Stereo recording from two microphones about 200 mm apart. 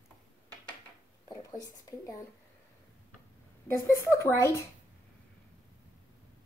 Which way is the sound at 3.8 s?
15° left (ahead or behind).